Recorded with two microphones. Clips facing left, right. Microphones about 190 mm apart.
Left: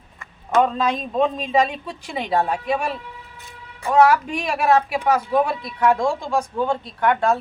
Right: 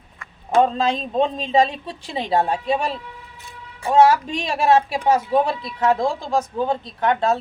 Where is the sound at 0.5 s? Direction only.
25° right (ahead or behind).